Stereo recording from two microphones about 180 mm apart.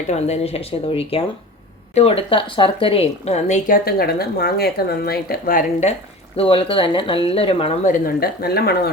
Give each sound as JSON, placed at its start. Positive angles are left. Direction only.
{"t": 0.1, "sound": "a woman's voice", "side_deg": 35}
{"t": 3.8, "sound": "speech", "side_deg": 60}
{"t": 6.3, "sound": "a woman's voice", "side_deg": 30}
{"t": 7.9, "sound": "speech", "side_deg": 55}